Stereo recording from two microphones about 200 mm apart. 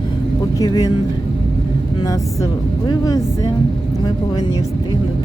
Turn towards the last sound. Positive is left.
turn(degrees=20)  # may be behind; listen again after turning